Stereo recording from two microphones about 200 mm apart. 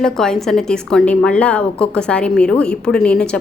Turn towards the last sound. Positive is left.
turn(degrees=5)  # may be behind; listen again after turning